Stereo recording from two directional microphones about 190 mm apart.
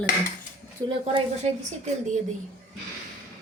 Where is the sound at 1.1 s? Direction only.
35° right (ahead or behind).